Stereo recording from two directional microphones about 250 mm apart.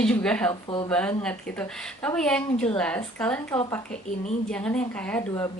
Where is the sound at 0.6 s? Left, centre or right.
Centre.